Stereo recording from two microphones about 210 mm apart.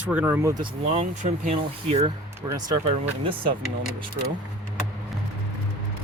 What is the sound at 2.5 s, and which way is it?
Speech, 15° right (ahead or behind).